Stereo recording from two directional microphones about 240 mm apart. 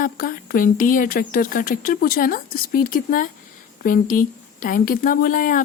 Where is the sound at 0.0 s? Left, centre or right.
Left.